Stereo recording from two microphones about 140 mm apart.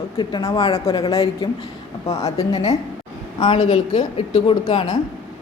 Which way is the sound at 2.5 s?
40° left (ahead or behind).